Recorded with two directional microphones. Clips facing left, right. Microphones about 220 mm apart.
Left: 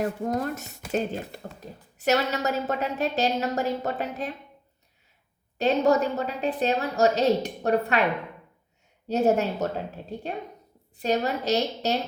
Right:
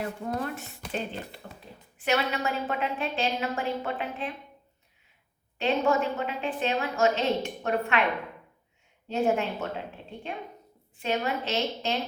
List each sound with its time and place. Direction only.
0.0 s speech: 40° left (ahead or behind)
5.5 s speech: 40° left (ahead or behind)
9.0 s speech: 40° left (ahead or behind)